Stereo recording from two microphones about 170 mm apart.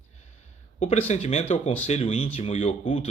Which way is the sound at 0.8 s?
40° left (ahead or behind).